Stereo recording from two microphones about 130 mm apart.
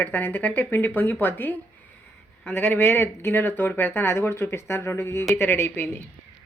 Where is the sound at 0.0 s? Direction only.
15° left (ahead or behind).